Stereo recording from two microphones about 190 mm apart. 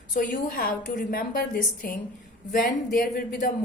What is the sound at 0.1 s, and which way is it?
A woman's voice, 45° left (ahead or behind).